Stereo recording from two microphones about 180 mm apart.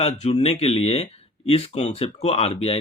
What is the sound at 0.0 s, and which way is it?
Speech, 35° left (ahead or behind).